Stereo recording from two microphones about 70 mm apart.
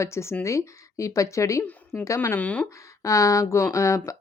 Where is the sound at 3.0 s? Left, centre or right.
Left.